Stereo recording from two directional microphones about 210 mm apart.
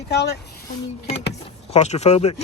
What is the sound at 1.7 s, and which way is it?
Speech, 30° left (ahead or behind).